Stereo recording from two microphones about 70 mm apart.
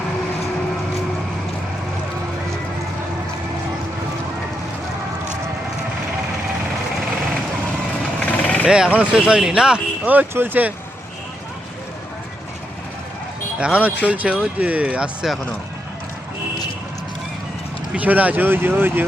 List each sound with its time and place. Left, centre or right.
8.2 s vehicle: centre
8.6 s speech: centre; by 10.7 s right
13.6 s speech: centre
17.9 s speech: right